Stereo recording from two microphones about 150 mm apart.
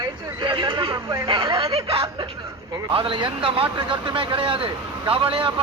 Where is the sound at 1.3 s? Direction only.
35° right (ahead or behind).